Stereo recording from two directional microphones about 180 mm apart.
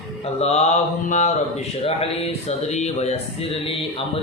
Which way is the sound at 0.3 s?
35° left (ahead or behind).